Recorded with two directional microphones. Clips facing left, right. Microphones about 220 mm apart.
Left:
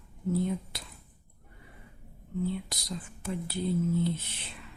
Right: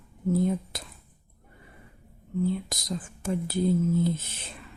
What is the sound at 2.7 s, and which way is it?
Speech, 45° right (ahead or behind).